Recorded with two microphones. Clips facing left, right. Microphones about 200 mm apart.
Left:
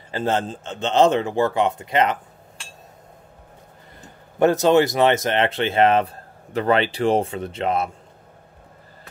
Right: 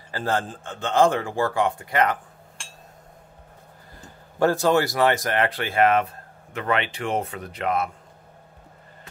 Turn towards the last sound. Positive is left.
turn(degrees=25)  # may be behind; listen again after turning